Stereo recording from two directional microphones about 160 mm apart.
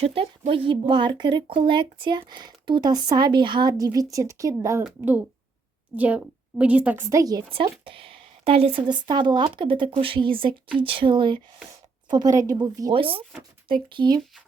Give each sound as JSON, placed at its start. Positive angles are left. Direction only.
{"t": 0.0, "sound": "speech", "side_deg": -35}
{"t": 4.8, "sound": "a child's voice", "side_deg": -10}